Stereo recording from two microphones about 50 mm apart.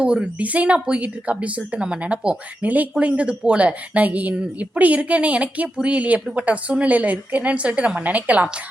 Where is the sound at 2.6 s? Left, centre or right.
Right.